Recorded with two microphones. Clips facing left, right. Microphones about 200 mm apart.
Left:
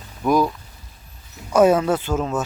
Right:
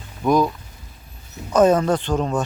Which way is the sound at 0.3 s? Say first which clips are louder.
Right 1 dB; 5° left (ahead or behind).